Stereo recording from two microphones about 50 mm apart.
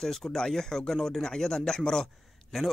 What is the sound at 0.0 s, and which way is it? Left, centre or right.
Speech, centre.